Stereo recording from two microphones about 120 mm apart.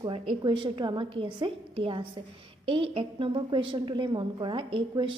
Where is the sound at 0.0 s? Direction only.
45° right (ahead or behind).